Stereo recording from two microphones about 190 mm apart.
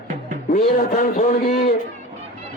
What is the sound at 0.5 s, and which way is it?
A man's voice, 45° left (ahead or behind).